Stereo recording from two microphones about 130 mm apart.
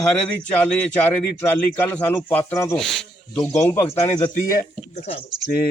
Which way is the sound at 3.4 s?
20° left (ahead or behind).